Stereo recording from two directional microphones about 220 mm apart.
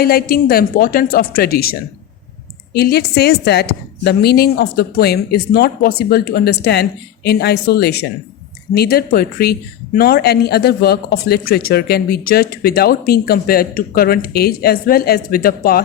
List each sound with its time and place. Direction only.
0.0 s speech: 45° left (ahead or behind)
2.7 s speech: 45° left (ahead or behind)